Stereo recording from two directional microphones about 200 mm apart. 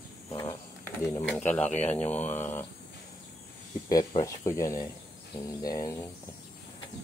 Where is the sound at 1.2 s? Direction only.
5° left (ahead or behind).